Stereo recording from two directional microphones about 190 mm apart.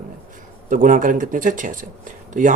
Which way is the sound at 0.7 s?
45° right (ahead or behind).